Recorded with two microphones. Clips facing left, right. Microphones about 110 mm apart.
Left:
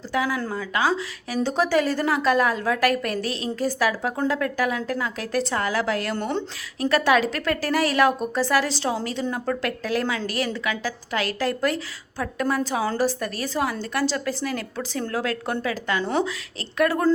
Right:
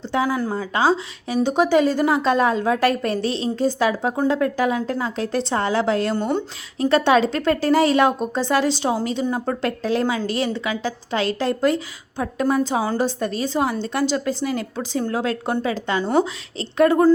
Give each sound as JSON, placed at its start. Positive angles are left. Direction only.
{"t": 0.1, "sound": "a woman's voice", "side_deg": -25}
{"t": 6.1, "sound": "speech", "side_deg": -15}
{"t": 6.7, "sound": "a woman's voice", "side_deg": -25}